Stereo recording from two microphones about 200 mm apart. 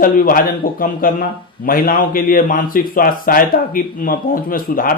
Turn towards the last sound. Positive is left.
turn(degrees=45)  # may be behind; listen again after turning